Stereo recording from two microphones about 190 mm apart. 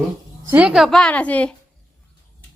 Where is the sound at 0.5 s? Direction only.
5° right (ahead or behind).